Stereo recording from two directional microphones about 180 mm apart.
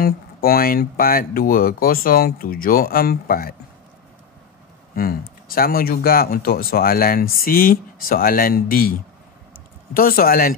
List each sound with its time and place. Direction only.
0.0 s speech: 55° left (ahead or behind)
4.9 s speech: 55° left (ahead or behind)
9.9 s speech: 55° left (ahead or behind)